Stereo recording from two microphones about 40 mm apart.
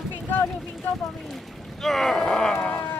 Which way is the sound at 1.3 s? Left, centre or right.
Centre.